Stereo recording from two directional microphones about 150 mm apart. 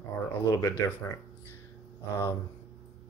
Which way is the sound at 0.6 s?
20° left (ahead or behind).